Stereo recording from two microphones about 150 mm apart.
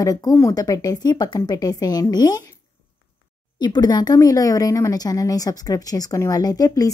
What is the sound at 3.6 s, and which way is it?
Speech, 25° left (ahead or behind).